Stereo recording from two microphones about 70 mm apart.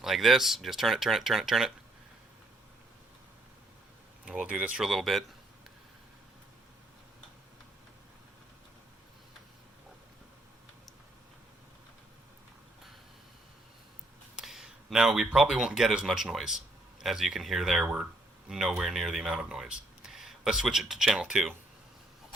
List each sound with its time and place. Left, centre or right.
0.0 s speech: centre
4.3 s speech: centre
4.8 s speech: centre
14.3 s speech: centre